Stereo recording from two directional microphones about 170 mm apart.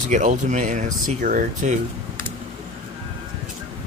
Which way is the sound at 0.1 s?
45° right (ahead or behind).